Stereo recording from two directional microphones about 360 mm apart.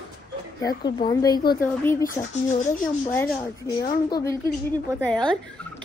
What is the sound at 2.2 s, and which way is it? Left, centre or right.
Speech, centre.